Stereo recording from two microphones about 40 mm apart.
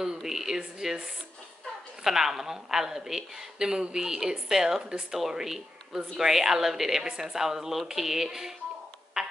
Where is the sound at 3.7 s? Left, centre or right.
Right.